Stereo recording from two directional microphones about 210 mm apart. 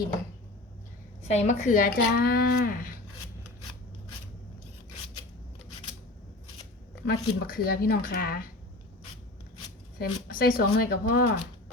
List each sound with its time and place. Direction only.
1.3 s speech: 35° left (ahead or behind)
7.0 s speech: 45° left (ahead or behind)
10.0 s speech: 45° left (ahead or behind)